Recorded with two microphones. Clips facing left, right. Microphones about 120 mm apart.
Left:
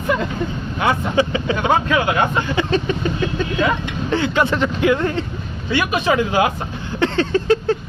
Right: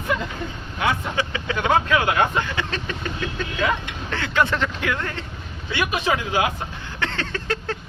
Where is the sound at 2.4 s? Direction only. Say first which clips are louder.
Left 9 dB; 15° left (ahead or behind).